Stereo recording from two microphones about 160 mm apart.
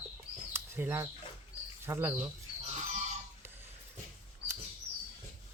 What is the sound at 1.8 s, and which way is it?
Speech, 15° right (ahead or behind).